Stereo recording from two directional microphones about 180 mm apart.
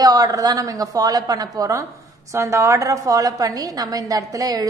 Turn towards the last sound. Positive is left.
turn(degrees=-20)  # may be behind; listen again after turning